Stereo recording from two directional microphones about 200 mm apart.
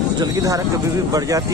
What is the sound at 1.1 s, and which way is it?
Speech, 15° right (ahead or behind).